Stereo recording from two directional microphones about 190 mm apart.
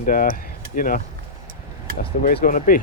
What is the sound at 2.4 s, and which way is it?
Speech, 45° left (ahead or behind).